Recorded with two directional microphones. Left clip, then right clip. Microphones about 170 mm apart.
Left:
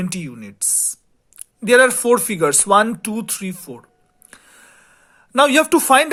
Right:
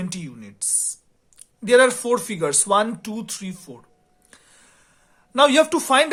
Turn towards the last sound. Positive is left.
turn(degrees=40)  # may be behind; listen again after turning